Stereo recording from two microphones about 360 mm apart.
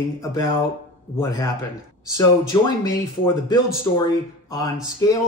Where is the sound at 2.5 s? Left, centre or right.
Centre.